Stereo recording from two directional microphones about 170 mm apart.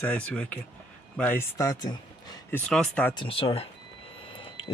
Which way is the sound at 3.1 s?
30° left (ahead or behind).